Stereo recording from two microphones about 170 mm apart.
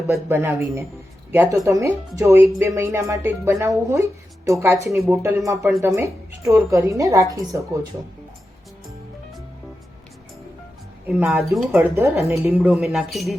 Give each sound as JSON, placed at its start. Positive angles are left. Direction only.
{"t": 0.1, "sound": "speech", "side_deg": -15}
{"t": 11.3, "sound": "speech", "side_deg": 0}
{"t": 11.8, "sound": "speech", "side_deg": -15}